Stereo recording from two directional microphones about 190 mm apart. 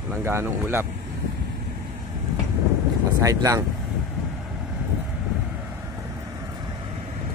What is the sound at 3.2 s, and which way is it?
Speech, 15° right (ahead or behind).